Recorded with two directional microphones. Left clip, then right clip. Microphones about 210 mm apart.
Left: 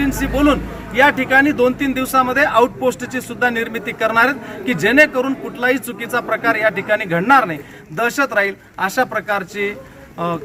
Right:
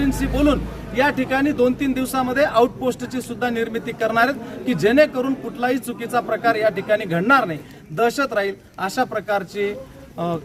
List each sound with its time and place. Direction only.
0.0 s a man's voice: centre (ahead or behind)